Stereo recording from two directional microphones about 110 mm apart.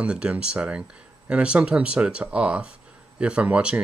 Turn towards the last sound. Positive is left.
turn(degrees=-10)  # may be behind; listen again after turning